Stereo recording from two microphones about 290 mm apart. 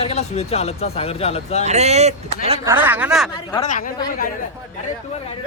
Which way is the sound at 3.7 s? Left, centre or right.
Left.